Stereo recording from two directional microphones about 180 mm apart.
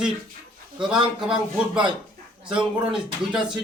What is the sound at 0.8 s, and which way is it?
Speech, 5° right (ahead or behind).